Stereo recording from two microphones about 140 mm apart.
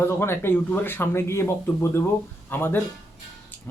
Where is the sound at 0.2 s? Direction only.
15° left (ahead or behind).